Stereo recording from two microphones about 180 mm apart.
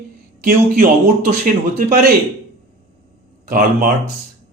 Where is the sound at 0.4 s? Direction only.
50° right (ahead or behind).